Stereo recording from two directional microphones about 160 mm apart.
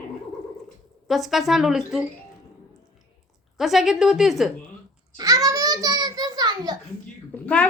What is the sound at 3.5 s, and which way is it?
Speech, centre (ahead or behind).